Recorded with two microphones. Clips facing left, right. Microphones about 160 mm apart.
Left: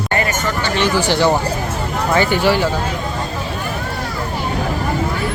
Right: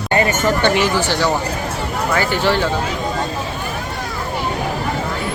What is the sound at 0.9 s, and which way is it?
Speech, 15° left (ahead or behind).